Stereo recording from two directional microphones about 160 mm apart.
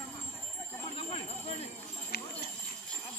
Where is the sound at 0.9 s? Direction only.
40° left (ahead or behind).